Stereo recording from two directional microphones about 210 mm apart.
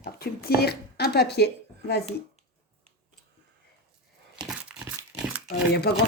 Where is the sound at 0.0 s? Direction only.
45° left (ahead or behind).